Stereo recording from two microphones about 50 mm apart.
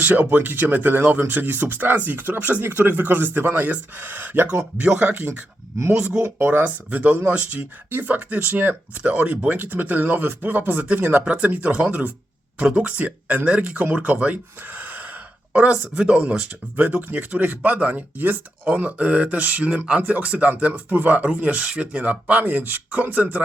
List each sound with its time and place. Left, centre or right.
0.0 s speech: right
2.7 s speech: right
4.8 s speech: right
6.4 s speech: right
9.0 s speech: right
16.7 s speech: right